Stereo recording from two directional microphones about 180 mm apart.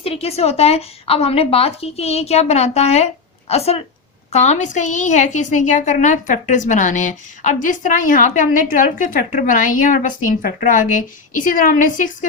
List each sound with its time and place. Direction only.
0.0 s a woman's voice: 35° left (ahead or behind)